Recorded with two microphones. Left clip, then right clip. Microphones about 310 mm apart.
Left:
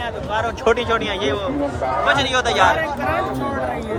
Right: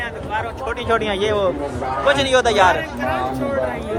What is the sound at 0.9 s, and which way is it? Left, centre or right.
A man's voice, centre.